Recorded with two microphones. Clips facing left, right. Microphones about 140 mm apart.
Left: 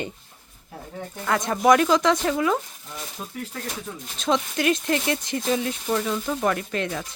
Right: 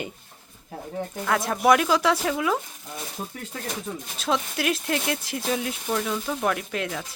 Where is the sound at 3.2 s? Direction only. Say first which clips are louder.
Right 4 dB; 20° right (ahead or behind).